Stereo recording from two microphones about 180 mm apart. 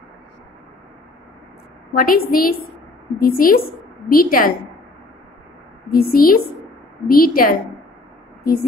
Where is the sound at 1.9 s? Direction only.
55° left (ahead or behind).